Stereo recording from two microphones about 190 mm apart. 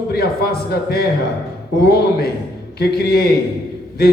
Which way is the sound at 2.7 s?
55° left (ahead or behind).